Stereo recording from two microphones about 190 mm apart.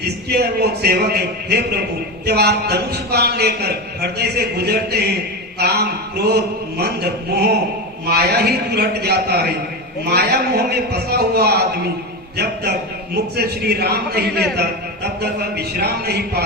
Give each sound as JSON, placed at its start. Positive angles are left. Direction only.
{"t": 0.0, "sound": "a man's voice", "side_deg": -55}
{"t": 13.3, "sound": "a man's voice", "side_deg": -60}